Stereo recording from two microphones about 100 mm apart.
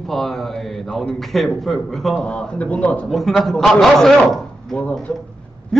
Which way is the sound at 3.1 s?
Centre (ahead or behind).